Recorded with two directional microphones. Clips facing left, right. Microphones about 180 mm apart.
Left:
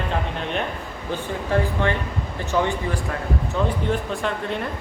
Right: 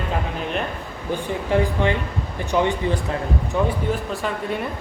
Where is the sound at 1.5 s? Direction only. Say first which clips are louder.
Right 2 dB; 15° right (ahead or behind).